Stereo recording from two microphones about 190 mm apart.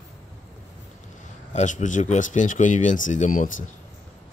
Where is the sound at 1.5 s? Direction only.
40° left (ahead or behind).